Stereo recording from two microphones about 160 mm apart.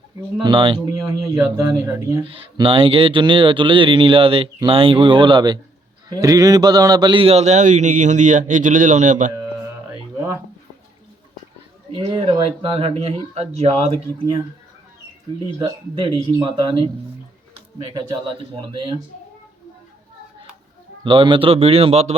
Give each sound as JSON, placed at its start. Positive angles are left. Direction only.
{"t": 0.4, "sound": "speech", "side_deg": -30}
{"t": 2.3, "sound": "a man's voice", "side_deg": -35}
{"t": 11.9, "sound": "speech", "side_deg": -35}
{"t": 16.4, "sound": "speech", "side_deg": -30}
{"t": 17.9, "sound": "speech", "side_deg": -30}
{"t": 21.0, "sound": "speech", "side_deg": -30}